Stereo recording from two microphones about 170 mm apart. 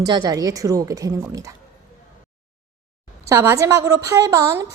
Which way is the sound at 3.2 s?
15° right (ahead or behind).